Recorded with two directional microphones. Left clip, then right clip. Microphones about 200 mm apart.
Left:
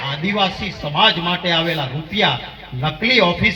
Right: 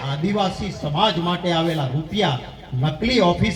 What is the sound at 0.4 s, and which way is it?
Speech, 70° right (ahead or behind).